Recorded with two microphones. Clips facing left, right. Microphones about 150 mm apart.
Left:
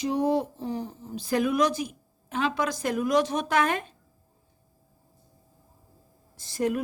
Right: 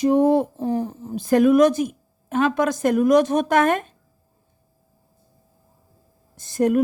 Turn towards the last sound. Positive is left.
turn(degrees=-50)  # may be behind; listen again after turning